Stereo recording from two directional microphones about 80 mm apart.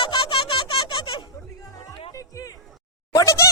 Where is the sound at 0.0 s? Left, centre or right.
Left.